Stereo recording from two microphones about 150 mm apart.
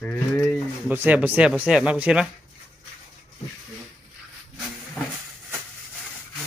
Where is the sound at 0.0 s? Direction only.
10° left (ahead or behind).